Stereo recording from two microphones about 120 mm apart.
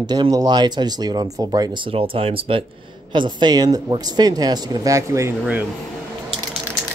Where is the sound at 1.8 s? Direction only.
50° right (ahead or behind); by 5.3 s 25° right (ahead or behind).